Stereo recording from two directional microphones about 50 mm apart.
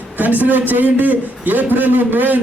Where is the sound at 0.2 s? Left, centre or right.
Right.